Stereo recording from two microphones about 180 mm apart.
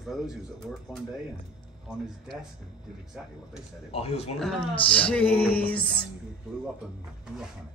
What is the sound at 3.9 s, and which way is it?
Speech, 35° left (ahead or behind).